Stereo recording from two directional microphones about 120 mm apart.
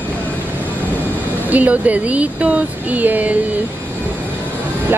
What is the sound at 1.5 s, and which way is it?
Speech, 15° right (ahead or behind).